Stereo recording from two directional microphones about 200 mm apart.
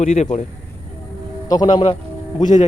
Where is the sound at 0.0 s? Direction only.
35° left (ahead or behind).